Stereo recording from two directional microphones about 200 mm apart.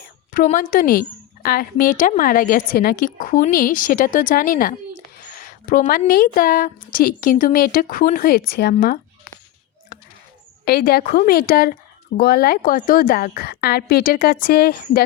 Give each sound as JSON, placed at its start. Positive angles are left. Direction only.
{"t": 0.3, "sound": "a woman's voice", "side_deg": 45}
{"t": 9.9, "sound": "a sound", "side_deg": 45}
{"t": 10.7, "sound": "a woman's voice", "side_deg": 50}